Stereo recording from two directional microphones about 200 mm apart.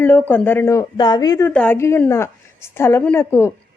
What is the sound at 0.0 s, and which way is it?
A woman's voice, 10° left (ahead or behind).